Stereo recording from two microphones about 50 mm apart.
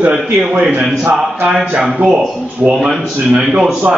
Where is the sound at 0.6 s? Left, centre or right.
Right.